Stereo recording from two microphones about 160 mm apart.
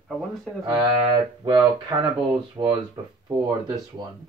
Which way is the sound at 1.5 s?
30° right (ahead or behind).